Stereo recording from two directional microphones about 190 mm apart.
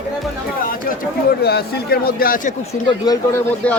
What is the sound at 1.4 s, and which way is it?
Speech, 55° left (ahead or behind).